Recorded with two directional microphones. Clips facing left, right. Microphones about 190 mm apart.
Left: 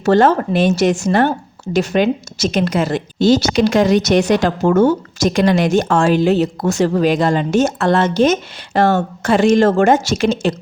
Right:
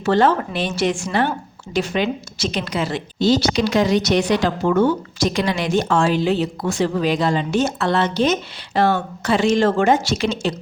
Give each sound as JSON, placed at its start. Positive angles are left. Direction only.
{"t": 0.0, "sound": "speech", "side_deg": 45}